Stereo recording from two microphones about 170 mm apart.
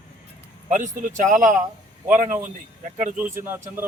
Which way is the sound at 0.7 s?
45° right (ahead or behind).